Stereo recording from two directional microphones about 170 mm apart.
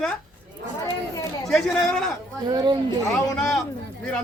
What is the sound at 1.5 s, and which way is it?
Speech, 5° left (ahead or behind).